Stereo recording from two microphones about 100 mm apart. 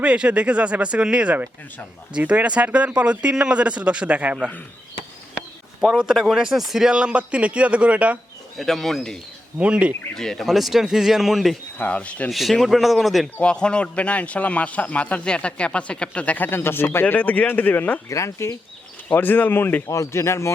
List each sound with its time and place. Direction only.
0.0 s speech: 10° right (ahead or behind)
5.8 s speech: 5° right (ahead or behind)
8.5 s a man's voice: 5° left (ahead or behind)
9.6 s speech: 10° right (ahead or behind)
10.2 s a man's voice: 5° left (ahead or behind)
11.8 s a man's voice: 15° left (ahead or behind)
12.3 s a man's voice: centre (ahead or behind); by 18.0 s 15° left (ahead or behind)
18.1 s speech: 30° left (ahead or behind)
19.0 s speech: 20° left (ahead or behind)